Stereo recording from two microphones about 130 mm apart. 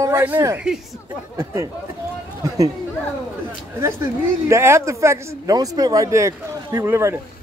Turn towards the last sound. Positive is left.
turn(degrees=-20)  # may be behind; listen again after turning